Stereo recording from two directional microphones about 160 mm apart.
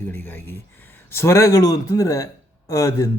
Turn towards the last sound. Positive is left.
turn(degrees=20)  # may be behind; listen again after turning